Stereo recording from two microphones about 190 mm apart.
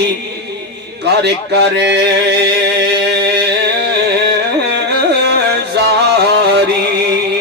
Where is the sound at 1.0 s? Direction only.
60° right (ahead or behind).